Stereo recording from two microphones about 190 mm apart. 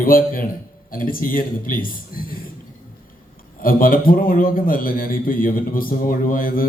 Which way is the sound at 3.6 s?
50° left (ahead or behind).